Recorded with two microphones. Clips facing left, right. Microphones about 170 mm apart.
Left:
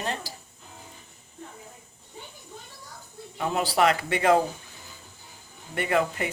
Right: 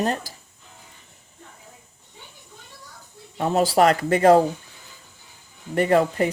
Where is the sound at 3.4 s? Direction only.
40° right (ahead or behind).